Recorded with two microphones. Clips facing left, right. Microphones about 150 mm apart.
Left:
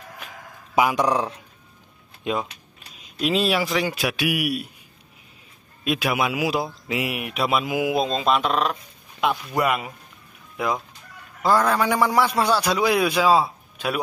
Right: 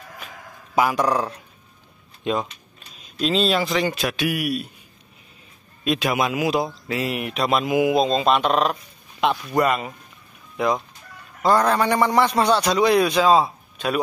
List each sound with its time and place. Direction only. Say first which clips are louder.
0.7 s a man's voice: even; 15° left (ahead or behind)
5.9 s a man's voice: right 1 dB; 5° left (ahead or behind)
11.4 s a man's voice: right 1 dB; centre (ahead or behind)